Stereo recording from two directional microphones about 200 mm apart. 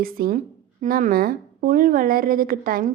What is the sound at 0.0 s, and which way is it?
A woman's voice, 45° right (ahead or behind).